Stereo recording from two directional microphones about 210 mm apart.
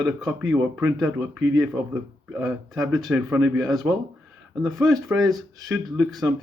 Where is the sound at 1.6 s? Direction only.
15° right (ahead or behind).